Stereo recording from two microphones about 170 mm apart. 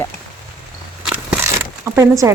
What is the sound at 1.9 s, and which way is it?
Speech, 20° right (ahead or behind).